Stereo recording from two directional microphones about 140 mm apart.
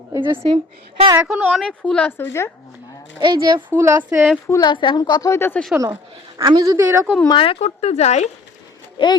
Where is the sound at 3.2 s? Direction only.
30° right (ahead or behind).